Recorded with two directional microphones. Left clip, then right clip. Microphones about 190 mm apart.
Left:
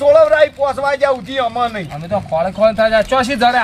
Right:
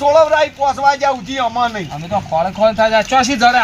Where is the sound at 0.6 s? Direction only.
15° left (ahead or behind).